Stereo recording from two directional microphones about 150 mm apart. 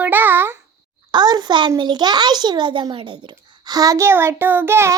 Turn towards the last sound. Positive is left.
turn(degrees=-15)  # may be behind; listen again after turning